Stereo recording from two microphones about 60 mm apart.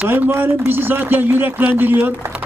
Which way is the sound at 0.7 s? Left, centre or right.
Right.